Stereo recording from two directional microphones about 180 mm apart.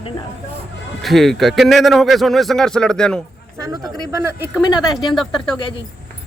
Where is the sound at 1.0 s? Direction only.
Centre (ahead or behind).